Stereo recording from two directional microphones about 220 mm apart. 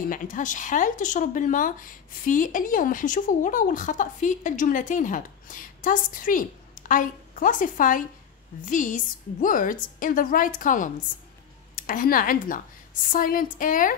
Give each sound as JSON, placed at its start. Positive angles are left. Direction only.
{"t": 0.1, "sound": "speech", "side_deg": 35}